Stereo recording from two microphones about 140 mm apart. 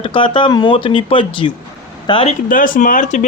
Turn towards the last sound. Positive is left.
turn(degrees=65)  # may be behind; listen again after turning